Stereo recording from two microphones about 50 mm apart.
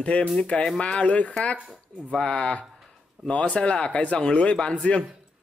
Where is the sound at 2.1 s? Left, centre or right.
Centre.